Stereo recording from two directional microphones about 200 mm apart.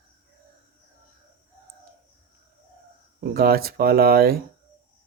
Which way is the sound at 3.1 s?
50° right (ahead or behind).